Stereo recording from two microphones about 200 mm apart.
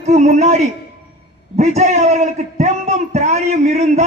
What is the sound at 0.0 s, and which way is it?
A man's voice, 35° right (ahead or behind).